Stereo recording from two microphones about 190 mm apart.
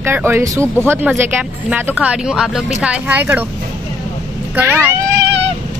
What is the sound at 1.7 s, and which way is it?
Speech, 5° right (ahead or behind).